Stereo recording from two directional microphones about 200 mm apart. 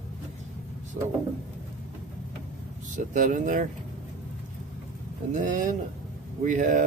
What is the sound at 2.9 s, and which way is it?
Speech, 40° right (ahead or behind).